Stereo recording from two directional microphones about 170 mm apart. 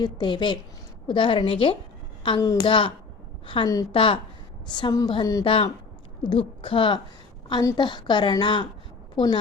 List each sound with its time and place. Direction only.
0.0 s a woman's voice: 25° left (ahead or behind)